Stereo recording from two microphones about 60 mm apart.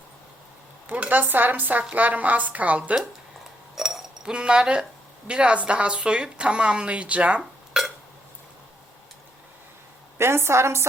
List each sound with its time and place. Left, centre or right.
0.9 s a woman's voice: right
3.8 s cutlery: centre
5.3 s a woman's voice: centre
7.8 s a sound: centre
10.2 s a woman's voice: right